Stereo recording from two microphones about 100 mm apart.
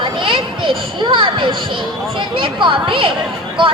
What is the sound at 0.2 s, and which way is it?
Children playing, 60° right (ahead or behind).